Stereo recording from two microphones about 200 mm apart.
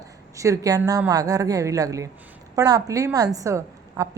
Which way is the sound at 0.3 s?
15° right (ahead or behind).